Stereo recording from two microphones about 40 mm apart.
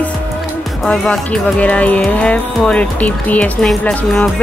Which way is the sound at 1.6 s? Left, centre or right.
Left.